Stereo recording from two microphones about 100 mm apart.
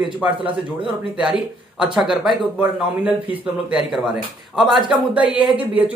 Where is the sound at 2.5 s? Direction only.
15° right (ahead or behind).